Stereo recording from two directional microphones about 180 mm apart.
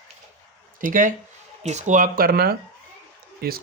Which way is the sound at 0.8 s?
50° right (ahead or behind).